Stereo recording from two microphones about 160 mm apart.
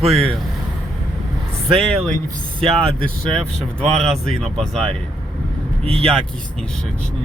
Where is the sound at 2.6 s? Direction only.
35° right (ahead or behind).